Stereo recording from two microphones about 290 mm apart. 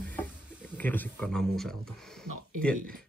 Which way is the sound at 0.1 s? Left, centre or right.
Centre.